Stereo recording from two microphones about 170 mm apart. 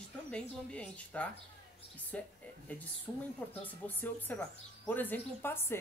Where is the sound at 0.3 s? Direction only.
5° left (ahead or behind).